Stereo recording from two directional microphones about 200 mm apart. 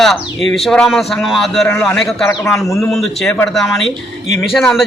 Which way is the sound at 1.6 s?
10° left (ahead or behind).